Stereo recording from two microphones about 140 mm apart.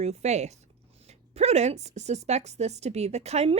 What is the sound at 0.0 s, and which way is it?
Speech, 50° right (ahead or behind).